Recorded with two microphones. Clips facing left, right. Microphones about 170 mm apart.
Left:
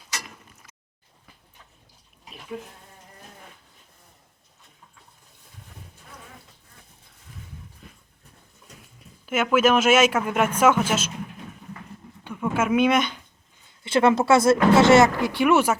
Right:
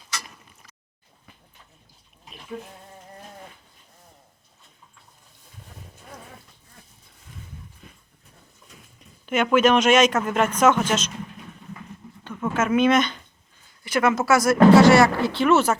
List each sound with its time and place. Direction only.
7.8 s horse: centre (ahead or behind)
9.2 s speech: 5° left (ahead or behind)
12.2 s a sound: 10° left (ahead or behind)
13.8 s speech: 30° left (ahead or behind); by 15.8 s 10° left (ahead or behind)